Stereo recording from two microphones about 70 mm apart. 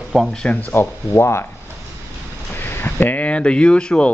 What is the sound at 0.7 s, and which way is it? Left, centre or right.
Speech, left.